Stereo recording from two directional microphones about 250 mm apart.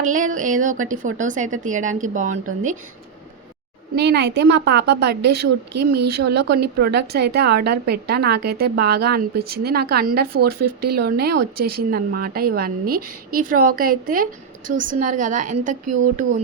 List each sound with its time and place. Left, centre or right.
0.0 s a woman's voice: right
3.9 s a woman's voice: right
5.8 s speech: right
6.1 s a woman's voice: right
10.6 s speech: right
10.8 s a woman's voice: right